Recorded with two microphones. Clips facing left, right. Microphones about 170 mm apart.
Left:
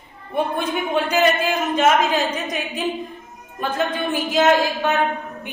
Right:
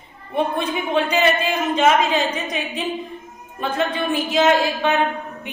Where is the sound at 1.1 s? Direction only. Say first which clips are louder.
Left 1 dB; centre (ahead or behind).